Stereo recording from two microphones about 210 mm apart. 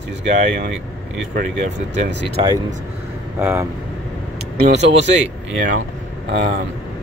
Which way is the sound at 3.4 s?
10° right (ahead or behind).